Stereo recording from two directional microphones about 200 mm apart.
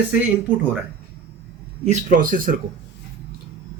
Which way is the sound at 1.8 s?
40° right (ahead or behind).